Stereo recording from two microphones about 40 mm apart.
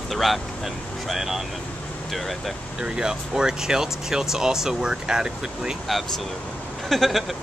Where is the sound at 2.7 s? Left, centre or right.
Centre.